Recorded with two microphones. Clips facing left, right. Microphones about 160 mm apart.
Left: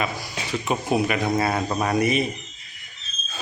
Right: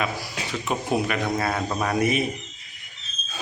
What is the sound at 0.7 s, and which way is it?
Speech, 5° left (ahead or behind).